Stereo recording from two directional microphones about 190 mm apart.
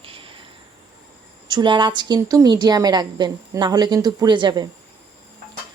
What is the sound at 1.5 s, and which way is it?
A woman's voice, 25° right (ahead or behind).